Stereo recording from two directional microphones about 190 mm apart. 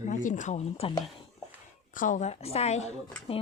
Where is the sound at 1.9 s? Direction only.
45° left (ahead or behind).